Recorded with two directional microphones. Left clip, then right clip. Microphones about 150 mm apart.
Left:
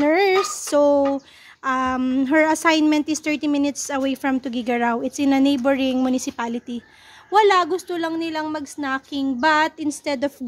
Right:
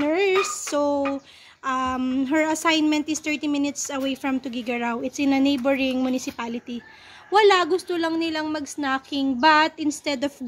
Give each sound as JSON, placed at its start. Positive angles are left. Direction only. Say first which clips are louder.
{"t": 0.0, "sound": "speech", "louder": "left 4 dB", "side_deg": 40}
{"t": 7.2, "sound": "a woman's voice", "louder": "left 1 dB", "side_deg": 10}